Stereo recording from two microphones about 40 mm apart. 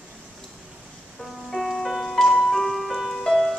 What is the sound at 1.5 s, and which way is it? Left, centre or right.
Music, centre.